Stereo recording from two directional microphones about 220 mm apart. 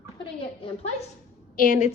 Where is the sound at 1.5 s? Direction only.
35° left (ahead or behind).